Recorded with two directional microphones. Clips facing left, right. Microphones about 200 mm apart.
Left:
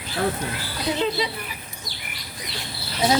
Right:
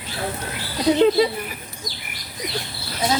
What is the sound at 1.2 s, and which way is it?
Speech, 50° right (ahead or behind).